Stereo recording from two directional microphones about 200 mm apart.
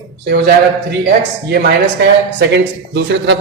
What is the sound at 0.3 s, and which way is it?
Speech, 55° right (ahead or behind).